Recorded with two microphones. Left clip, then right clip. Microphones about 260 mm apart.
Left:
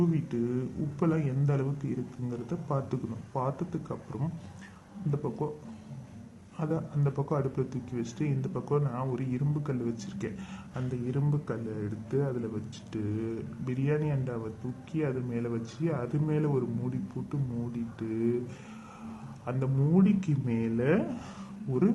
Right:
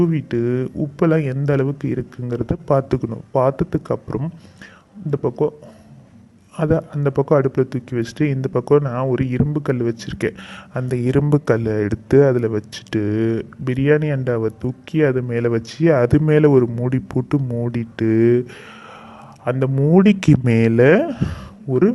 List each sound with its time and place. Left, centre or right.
0.0 s speech: right
6.6 s speech: right
19.5 s speech: right